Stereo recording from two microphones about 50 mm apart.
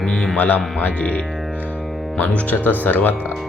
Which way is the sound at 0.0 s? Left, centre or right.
Centre.